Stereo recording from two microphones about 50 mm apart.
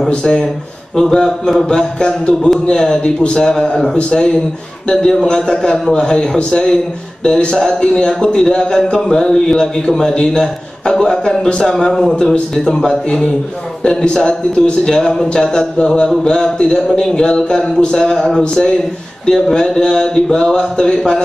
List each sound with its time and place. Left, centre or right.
0.2 s a man's voice: centre